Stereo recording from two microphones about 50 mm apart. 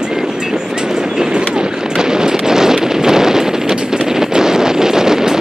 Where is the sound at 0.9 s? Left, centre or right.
Centre.